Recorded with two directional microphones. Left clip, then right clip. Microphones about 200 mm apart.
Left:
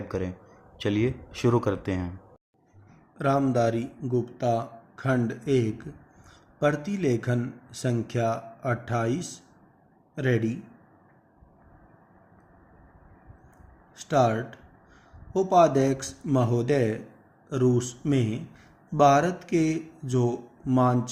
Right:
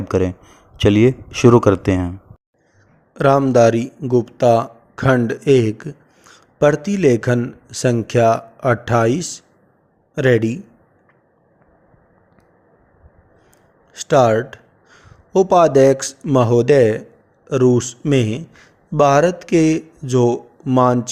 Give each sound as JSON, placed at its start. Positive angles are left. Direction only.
{"t": 0.1, "sound": "speech", "side_deg": -40}
{"t": 3.2, "sound": "speech", "side_deg": -50}
{"t": 13.9, "sound": "speech", "side_deg": -50}